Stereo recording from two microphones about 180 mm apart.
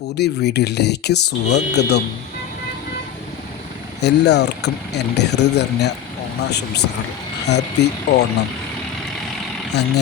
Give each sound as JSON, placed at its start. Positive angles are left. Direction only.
{"t": 0.2, "sound": "speech", "side_deg": 65}
{"t": 4.0, "sound": "speech", "side_deg": 70}